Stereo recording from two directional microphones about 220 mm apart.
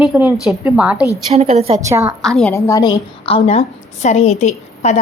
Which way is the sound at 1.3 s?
30° right (ahead or behind).